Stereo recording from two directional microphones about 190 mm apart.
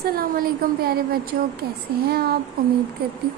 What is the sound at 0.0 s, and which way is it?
A woman's voice, 50° right (ahead or behind).